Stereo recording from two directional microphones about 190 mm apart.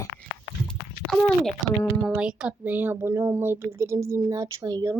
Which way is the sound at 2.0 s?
5° right (ahead or behind).